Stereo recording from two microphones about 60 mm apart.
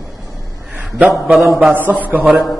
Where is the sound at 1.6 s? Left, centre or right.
Right.